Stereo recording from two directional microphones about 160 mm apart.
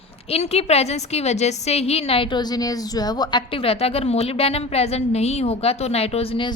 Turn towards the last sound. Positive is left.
turn(degrees=35)  # may be behind; listen again after turning